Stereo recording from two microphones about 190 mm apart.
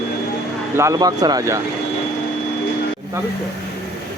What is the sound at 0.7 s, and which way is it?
Speech, 15° right (ahead or behind).